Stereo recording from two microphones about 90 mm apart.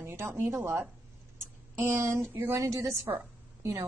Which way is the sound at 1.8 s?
30° right (ahead or behind).